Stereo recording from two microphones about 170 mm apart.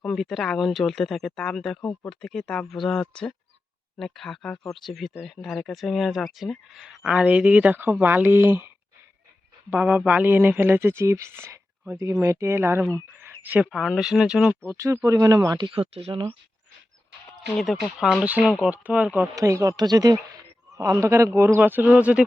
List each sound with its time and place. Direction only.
0.0 s speech: centre (ahead or behind); by 16.3 s 35° right (ahead or behind)
17.6 s speech: centre (ahead or behind)
19.4 s speech: 20° right (ahead or behind)